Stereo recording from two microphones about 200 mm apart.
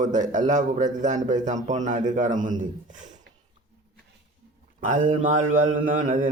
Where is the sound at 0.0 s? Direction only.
40° right (ahead or behind).